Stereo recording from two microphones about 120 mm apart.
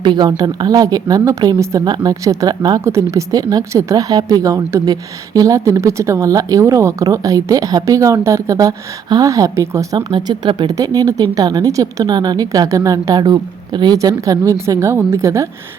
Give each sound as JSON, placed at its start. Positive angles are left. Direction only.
{"t": 0.0, "sound": "a woman's voice", "side_deg": -40}
{"t": 10.1, "sound": "a woman's voice", "side_deg": -40}